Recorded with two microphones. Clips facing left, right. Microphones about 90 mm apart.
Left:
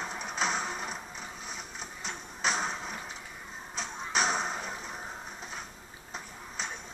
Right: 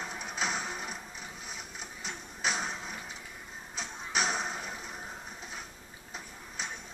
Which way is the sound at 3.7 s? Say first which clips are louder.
Left 2 dB; 5° right (ahead or behind).